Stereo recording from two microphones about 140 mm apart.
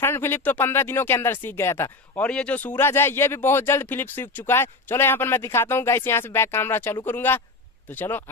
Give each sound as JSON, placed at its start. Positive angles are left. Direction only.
{"t": 0.0, "sound": "speech", "side_deg": 15}